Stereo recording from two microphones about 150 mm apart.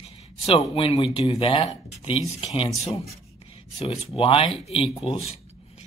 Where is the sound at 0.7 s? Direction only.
40° left (ahead or behind).